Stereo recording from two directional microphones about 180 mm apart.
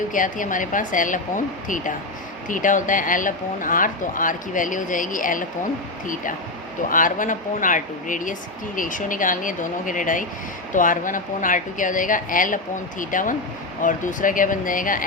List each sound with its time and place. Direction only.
0.1 s speech: 45° left (ahead or behind)
6.8 s speech: 45° left (ahead or behind)